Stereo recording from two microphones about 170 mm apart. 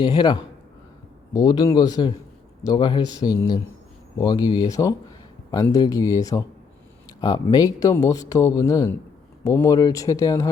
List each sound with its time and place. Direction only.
0.0 s speech: 25° left (ahead or behind)